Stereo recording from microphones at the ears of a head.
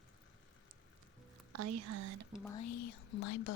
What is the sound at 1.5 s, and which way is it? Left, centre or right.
Speech, right.